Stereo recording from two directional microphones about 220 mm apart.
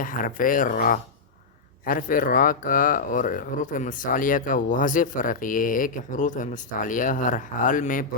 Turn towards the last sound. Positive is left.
turn(degrees=35)  # may be behind; listen again after turning